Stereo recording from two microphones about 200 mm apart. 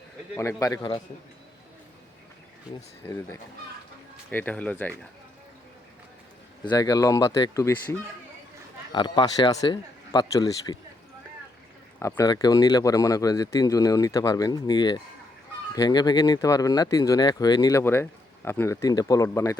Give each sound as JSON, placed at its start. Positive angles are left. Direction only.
{"t": 0.3, "sound": "speech", "side_deg": 15}
{"t": 4.3, "sound": "speech", "side_deg": 10}
{"t": 6.7, "sound": "speech", "side_deg": 20}
{"t": 8.9, "sound": "speech", "side_deg": 20}
{"t": 11.9, "sound": "speech", "side_deg": 15}